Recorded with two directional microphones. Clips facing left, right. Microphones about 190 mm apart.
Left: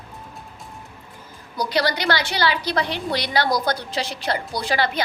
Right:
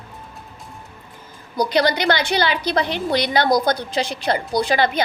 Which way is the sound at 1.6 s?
20° right (ahead or behind).